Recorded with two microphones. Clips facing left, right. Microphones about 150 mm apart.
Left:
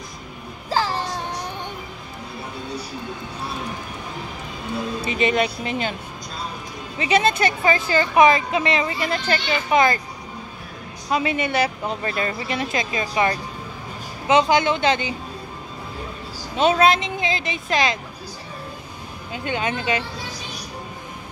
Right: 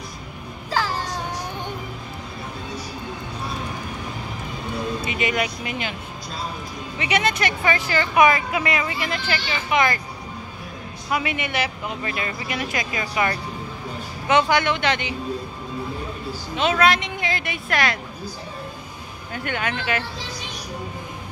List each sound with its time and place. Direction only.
5.0 s speech: 30° left (ahead or behind)
7.0 s speech: 30° left (ahead or behind)
11.1 s speech: 25° left (ahead or behind)
16.7 s speech: 25° left (ahead or behind)
19.3 s speech: 20° left (ahead or behind)